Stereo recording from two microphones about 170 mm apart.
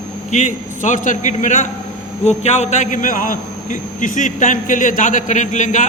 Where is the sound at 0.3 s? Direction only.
45° left (ahead or behind).